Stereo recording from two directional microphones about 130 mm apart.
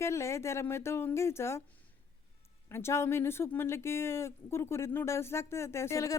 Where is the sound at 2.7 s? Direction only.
20° left (ahead or behind).